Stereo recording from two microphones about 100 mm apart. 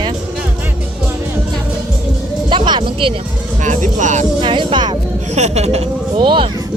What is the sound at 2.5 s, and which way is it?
Speech, 55° right (ahead or behind).